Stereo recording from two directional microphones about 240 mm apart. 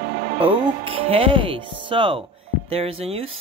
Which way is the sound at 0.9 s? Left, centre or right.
Right.